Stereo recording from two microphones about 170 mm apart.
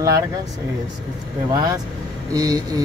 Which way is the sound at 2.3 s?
20° right (ahead or behind).